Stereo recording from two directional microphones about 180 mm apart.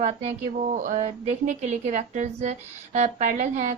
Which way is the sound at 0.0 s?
40° right (ahead or behind).